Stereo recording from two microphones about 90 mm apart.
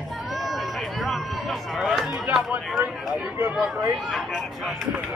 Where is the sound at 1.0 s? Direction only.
Centre (ahead or behind).